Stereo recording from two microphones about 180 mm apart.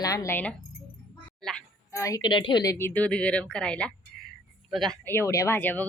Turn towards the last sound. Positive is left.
turn(degrees=10)  # may be behind; listen again after turning